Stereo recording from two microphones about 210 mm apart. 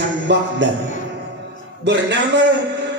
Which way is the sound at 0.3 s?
55° right (ahead or behind).